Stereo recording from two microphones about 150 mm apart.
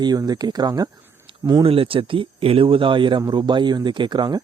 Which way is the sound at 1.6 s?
35° right (ahead or behind).